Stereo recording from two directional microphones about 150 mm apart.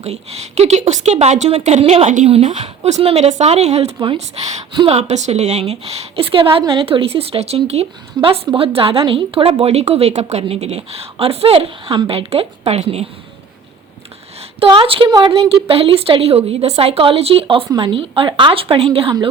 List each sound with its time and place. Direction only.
0.0 s a woman's voice: 45° right (ahead or behind)
4.7 s a woman's voice: 30° right (ahead or behind)
4.9 s a woman's voice: 50° right (ahead or behind)
14.6 s a woman's voice: 35° right (ahead or behind)